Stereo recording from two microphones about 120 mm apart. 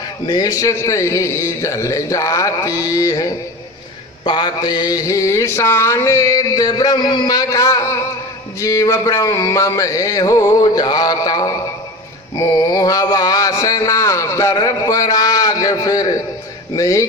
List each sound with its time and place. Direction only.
0.3 s mantra: 35° left (ahead or behind)
4.2 s mantra: 40° left (ahead or behind)
12.4 s a sound: 30° left (ahead or behind)
16.7 s mantra: 25° left (ahead or behind)